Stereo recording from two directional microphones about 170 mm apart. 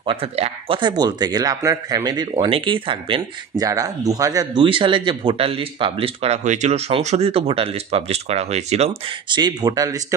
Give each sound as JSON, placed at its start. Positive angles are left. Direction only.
{"t": 0.0, "sound": "speech", "side_deg": -30}
{"t": 9.3, "sound": "speech", "side_deg": -25}